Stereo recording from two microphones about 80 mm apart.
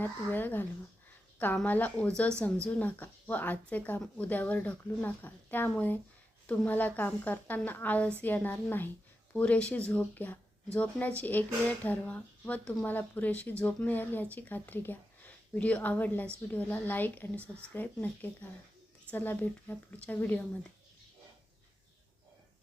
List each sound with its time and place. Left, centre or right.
0.0 s speech: left
9.3 s speech: centre